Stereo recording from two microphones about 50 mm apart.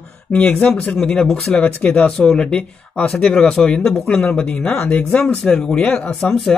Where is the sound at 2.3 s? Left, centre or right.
Centre.